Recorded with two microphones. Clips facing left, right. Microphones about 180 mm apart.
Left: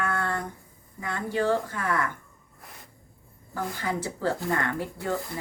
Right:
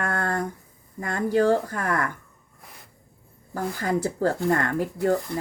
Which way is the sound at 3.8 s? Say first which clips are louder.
Right 6 dB; 45° right (ahead or behind).